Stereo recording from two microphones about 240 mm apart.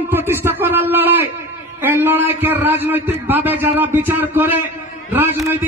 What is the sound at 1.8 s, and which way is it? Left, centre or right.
A man's voice, centre.